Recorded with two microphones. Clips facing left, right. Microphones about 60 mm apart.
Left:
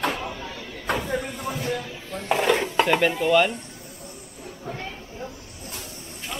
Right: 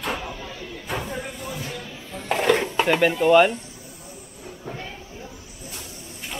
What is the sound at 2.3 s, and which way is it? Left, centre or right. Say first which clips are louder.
Dishes: right 1 dB; centre.